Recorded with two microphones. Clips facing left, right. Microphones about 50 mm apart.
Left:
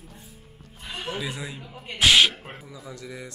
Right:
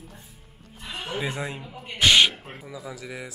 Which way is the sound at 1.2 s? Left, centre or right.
Right.